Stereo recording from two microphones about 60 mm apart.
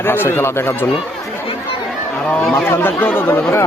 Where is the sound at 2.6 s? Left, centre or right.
Left.